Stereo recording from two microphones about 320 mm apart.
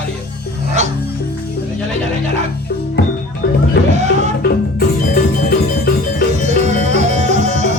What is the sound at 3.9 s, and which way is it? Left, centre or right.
Music, right.